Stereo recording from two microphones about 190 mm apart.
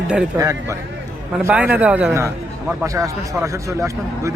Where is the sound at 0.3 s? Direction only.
15° right (ahead or behind).